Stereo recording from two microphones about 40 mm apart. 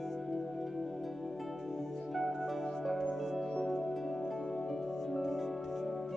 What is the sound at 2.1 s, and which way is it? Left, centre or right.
Music, centre.